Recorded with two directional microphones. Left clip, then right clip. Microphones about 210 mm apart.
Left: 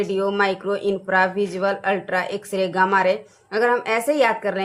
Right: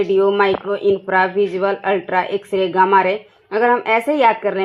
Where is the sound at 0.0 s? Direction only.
40° right (ahead or behind).